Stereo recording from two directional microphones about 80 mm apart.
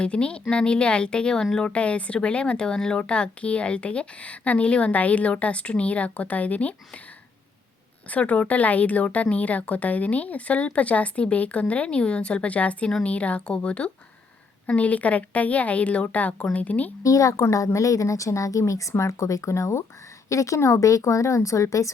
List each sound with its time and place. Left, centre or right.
0.0 s speech: centre
8.1 s speech: centre
17.0 s a woman's voice: left